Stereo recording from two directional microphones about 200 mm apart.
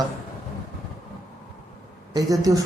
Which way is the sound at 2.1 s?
20° right (ahead or behind).